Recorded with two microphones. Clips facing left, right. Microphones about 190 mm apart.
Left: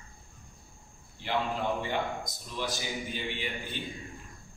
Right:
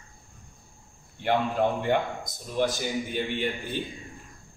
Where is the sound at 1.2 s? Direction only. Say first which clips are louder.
Right 6 dB; 55° right (ahead or behind).